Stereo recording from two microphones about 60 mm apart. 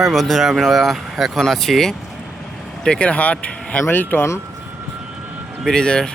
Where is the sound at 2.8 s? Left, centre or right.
Left.